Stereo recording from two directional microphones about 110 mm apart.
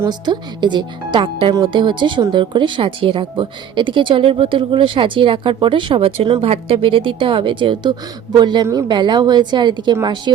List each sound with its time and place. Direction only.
0.1 s a woman's voice: 45° right (ahead or behind)
8.6 s speech: 25° right (ahead or behind)
8.9 s a woman's voice: 45° right (ahead or behind)